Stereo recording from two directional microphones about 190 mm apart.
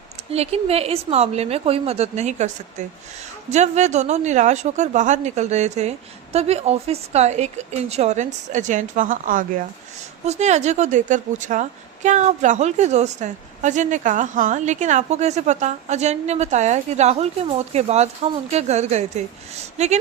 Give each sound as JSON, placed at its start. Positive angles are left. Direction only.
{"t": 0.3, "sound": "a woman's voice", "side_deg": -35}